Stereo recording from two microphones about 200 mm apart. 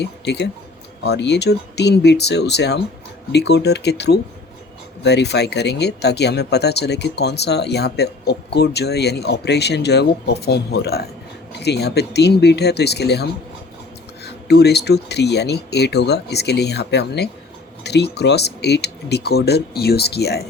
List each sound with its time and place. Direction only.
0.0 s speech: 55° left (ahead or behind)
14.3 s speech: 55° left (ahead or behind)